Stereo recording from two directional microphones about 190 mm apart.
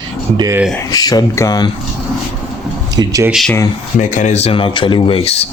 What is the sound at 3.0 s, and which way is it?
Speech, 15° right (ahead or behind).